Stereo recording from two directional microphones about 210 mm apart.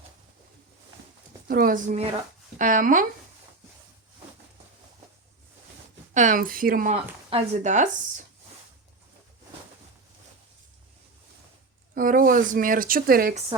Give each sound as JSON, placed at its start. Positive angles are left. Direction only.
{"t": 1.5, "sound": "a woman's voice", "side_deg": -45}
{"t": 6.1, "sound": "a woman's voice", "side_deg": -40}
{"t": 6.9, "sound": "a woman's voice", "side_deg": -30}
{"t": 11.9, "sound": "a woman's voice", "side_deg": -40}